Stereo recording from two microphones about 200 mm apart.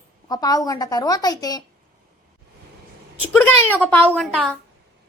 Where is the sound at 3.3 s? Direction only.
10° left (ahead or behind).